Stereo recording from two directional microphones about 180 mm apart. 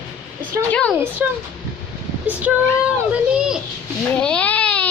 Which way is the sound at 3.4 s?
5° right (ahead or behind).